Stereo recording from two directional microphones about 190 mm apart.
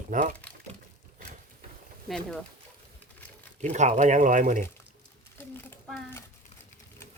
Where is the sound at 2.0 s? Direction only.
5° left (ahead or behind).